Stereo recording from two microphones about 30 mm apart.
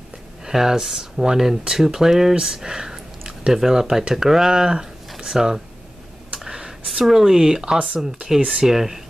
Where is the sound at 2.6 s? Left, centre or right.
Right.